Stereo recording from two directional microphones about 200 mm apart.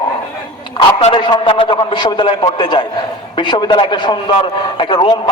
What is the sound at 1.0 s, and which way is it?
A man's voice, 25° left (ahead or behind).